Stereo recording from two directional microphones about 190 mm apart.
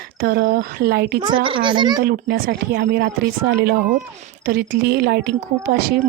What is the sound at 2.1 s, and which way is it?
A woman's voice, 50° right (ahead or behind).